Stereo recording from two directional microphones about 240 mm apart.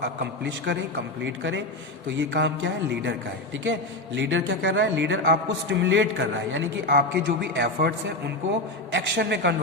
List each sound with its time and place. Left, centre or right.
1.2 s a man's voice: right